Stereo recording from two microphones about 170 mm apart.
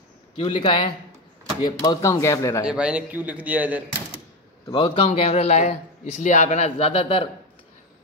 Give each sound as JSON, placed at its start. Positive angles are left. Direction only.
{"t": 0.4, "sound": "speech", "side_deg": 30}
{"t": 2.6, "sound": "a man's voice", "side_deg": -5}
{"t": 4.6, "sound": "a man's voice", "side_deg": 30}